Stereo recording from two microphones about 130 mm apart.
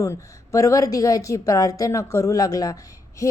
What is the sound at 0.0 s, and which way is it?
A woman's voice, 25° left (ahead or behind).